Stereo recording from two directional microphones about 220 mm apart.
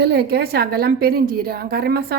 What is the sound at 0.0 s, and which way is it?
A woman's voice, 50° right (ahead or behind).